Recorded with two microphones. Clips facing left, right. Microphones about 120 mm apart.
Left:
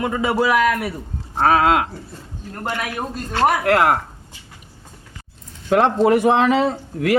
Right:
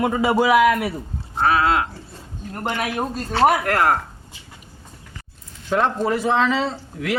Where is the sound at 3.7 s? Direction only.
20° left (ahead or behind).